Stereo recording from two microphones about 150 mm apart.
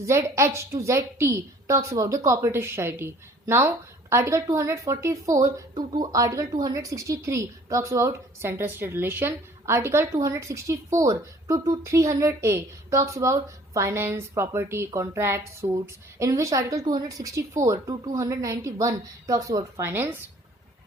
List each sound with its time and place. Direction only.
0.0 s a woman's voice: 20° right (ahead or behind)